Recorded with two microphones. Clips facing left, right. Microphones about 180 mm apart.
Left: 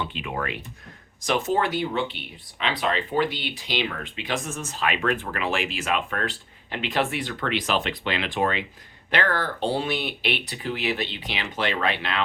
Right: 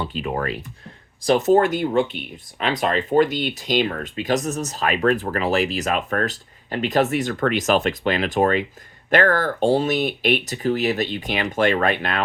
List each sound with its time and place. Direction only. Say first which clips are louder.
0.0 s speech: right 5 dB; 40° right (ahead or behind)